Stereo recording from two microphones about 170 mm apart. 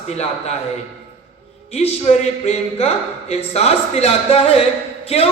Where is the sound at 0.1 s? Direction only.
40° left (ahead or behind).